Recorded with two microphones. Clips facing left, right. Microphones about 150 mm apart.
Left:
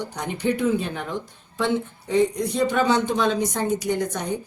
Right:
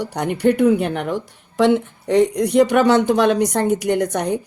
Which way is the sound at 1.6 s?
75° right (ahead or behind).